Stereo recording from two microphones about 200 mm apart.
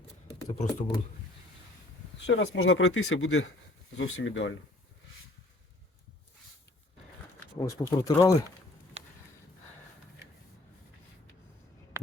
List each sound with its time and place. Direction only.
0.6 s speech: 35° left (ahead or behind)
2.2 s speech: 65° left (ahead or behind)
7.6 s speech: 20° left (ahead or behind)